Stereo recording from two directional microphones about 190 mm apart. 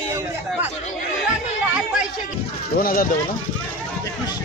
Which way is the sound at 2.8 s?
50° left (ahead or behind).